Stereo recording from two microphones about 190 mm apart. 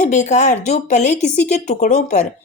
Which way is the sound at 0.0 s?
40° left (ahead or behind).